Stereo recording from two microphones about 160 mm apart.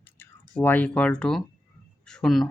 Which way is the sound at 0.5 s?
10° left (ahead or behind).